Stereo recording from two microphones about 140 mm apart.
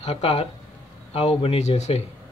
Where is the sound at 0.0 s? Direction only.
45° left (ahead or behind).